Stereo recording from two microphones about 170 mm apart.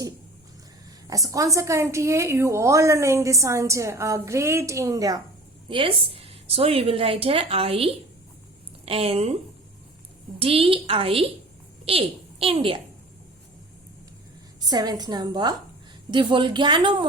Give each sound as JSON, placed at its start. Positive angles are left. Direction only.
{"t": 1.0, "sound": "a woman's voice", "side_deg": -20}
{"t": 5.6, "sound": "a woman's voice", "side_deg": -30}
{"t": 10.4, "sound": "a woman's voice", "side_deg": -35}
{"t": 14.7, "sound": "a woman's voice", "side_deg": -25}